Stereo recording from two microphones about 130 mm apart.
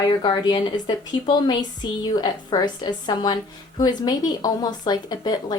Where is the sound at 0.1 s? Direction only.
35° left (ahead or behind).